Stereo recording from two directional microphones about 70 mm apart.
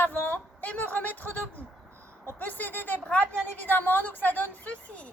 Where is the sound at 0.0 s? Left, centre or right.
Left.